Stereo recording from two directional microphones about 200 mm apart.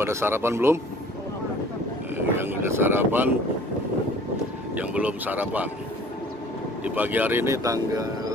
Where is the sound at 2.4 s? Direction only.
10° right (ahead or behind).